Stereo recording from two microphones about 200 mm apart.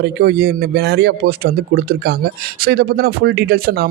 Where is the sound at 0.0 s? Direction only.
55° right (ahead or behind).